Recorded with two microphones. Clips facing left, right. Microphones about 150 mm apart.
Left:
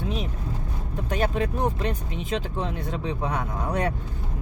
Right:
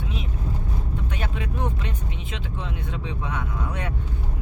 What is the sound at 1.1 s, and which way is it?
Speech, 40° left (ahead or behind).